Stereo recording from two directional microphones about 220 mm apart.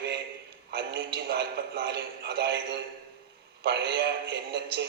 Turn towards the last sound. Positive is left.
turn(degrees=-50)  # may be behind; listen again after turning